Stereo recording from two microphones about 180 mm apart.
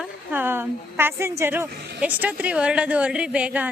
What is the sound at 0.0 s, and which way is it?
A woman's voice, 10° right (ahead or behind).